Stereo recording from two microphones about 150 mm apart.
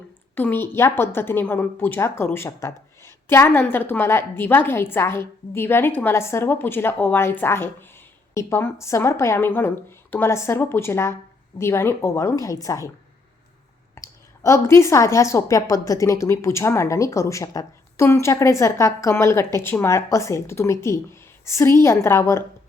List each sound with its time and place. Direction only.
0.3 s a woman's voice: 15° left (ahead or behind)
13.9 s a woman's voice: 20° left (ahead or behind)